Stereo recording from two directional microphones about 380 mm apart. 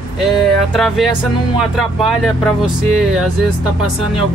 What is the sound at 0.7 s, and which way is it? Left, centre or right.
Speech, centre.